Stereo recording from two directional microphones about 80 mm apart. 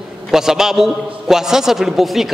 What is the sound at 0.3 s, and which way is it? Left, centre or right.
A man's voice, centre.